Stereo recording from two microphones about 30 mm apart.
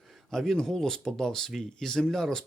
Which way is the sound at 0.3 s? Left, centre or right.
Centre.